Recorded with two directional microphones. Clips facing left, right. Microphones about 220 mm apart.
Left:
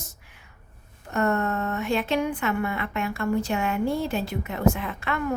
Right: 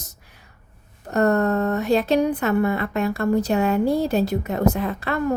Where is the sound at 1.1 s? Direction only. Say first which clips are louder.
Right 6 dB; 35° right (ahead or behind).